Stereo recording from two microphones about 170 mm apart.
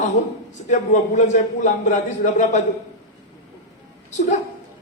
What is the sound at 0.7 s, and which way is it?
A man's voice, 45° left (ahead or behind).